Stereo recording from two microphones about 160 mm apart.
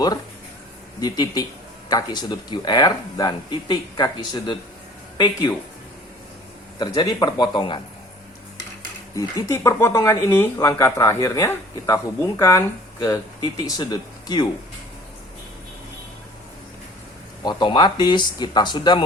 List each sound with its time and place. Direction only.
1.0 s speech: 25° left (ahead or behind)
6.7 s speech: 25° left (ahead or behind)
9.1 s speech: 20° left (ahead or behind)
17.4 s speech: 30° left (ahead or behind)